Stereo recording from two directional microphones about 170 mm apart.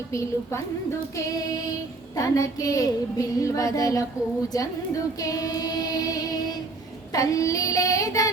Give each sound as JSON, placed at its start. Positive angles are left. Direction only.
{"t": 0.1, "sound": "child singing", "side_deg": 15}